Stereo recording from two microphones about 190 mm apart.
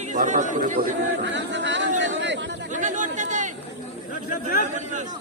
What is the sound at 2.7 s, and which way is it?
Chatter, 40° right (ahead or behind).